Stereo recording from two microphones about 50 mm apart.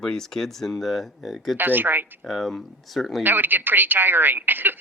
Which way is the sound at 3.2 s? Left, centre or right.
Right.